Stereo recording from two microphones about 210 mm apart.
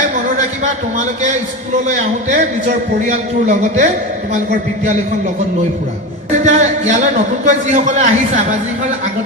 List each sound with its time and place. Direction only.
0.3 s a man's voice: 35° right (ahead or behind)
6.4 s a man's voice: 35° right (ahead or behind)